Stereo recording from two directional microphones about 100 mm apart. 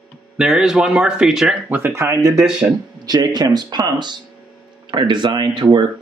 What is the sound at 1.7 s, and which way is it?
Speech, 25° right (ahead or behind).